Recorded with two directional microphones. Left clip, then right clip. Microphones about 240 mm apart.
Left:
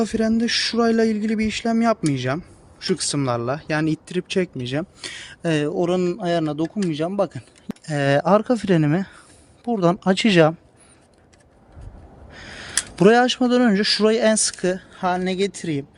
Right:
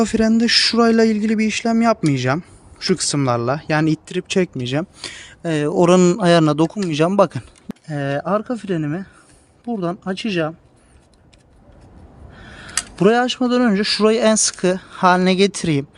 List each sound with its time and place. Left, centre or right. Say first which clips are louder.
0.0 s speech: right 4 dB; centre
5.2 s speech: even; centre
5.7 s a man's voice: right 8 dB; right
7.9 s speech: left 4 dB; centre
12.3 s speech: even; centre